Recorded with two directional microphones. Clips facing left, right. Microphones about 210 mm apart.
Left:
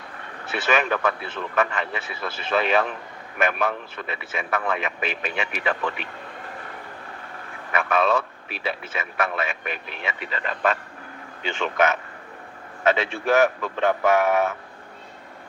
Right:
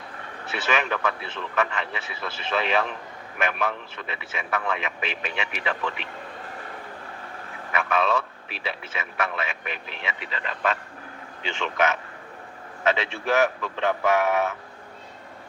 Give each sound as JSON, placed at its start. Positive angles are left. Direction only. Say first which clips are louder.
{"t": 0.5, "sound": "a man's voice", "louder": "left 3 dB", "side_deg": 45}
{"t": 7.7, "sound": "a man's voice", "louder": "left 3 dB", "side_deg": 45}